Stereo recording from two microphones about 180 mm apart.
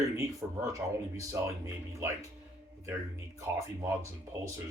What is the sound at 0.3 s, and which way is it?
Speech, 15° right (ahead or behind).